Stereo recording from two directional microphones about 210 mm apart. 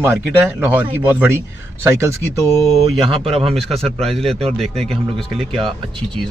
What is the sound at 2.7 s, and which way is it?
Speech, 25° right (ahead or behind).